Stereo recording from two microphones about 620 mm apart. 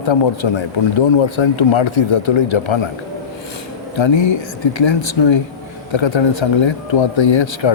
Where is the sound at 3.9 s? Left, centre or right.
Left.